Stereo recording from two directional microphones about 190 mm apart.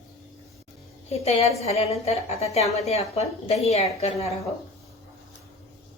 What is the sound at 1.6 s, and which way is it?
A woman's voice, 35° left (ahead or behind).